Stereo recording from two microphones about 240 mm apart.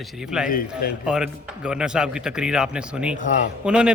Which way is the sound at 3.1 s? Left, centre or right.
Left.